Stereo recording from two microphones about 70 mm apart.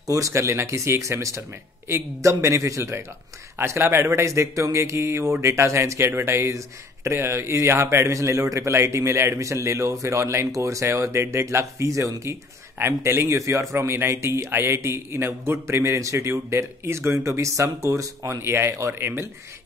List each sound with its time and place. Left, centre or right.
0.0 s speech: right
0.3 s a man's voice: right
12.7 s a man's voice: right